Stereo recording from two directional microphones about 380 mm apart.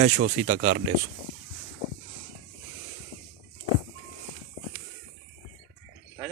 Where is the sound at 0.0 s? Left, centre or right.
Right.